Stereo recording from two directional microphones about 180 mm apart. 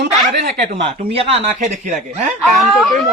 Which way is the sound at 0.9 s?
30° right (ahead or behind).